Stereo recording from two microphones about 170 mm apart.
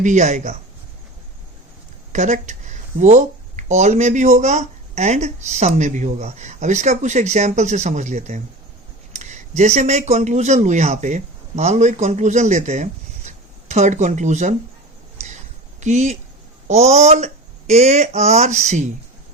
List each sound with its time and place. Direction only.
0.0 s speech: 45° right (ahead or behind)
2.1 s speech: 45° right (ahead or behind)
15.8 s speech: 45° right (ahead or behind)